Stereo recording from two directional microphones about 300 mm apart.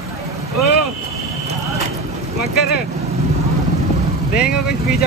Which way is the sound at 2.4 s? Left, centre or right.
Left.